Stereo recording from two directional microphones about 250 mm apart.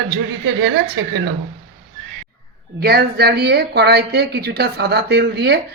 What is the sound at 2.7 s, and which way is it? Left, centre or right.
Speech, right.